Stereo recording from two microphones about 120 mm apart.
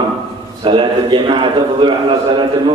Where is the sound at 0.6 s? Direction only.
40° right (ahead or behind).